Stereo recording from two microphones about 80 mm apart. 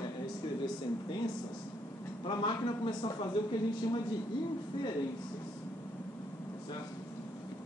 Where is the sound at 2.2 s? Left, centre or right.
Left.